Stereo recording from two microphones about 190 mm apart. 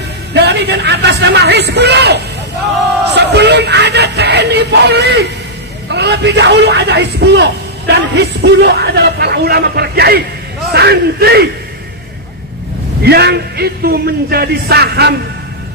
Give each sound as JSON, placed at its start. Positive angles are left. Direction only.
{"t": 0.3, "sound": "a man's voice", "side_deg": -60}
{"t": 3.1, "sound": "a sound", "side_deg": -60}
{"t": 5.9, "sound": "a man's voice", "side_deg": -60}
{"t": 13.0, "sound": "a man's voice", "side_deg": -60}